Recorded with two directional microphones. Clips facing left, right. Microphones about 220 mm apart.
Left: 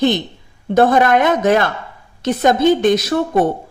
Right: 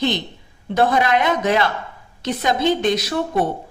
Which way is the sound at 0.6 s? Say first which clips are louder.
Left 5 dB; 50° left (ahead or behind).